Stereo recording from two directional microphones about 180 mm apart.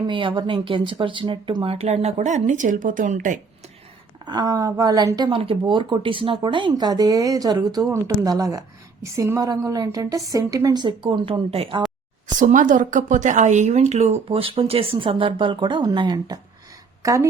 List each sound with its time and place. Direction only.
0.1 s speech: 30° right (ahead or behind); by 3.3 s 45° right (ahead or behind)
4.3 s speech: 20° right (ahead or behind)
12.4 s a woman's voice: 45° right (ahead or behind); by 17.2 s 20° right (ahead or behind)